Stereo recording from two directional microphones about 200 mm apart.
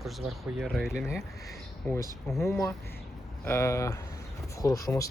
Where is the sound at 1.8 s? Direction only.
15° left (ahead or behind).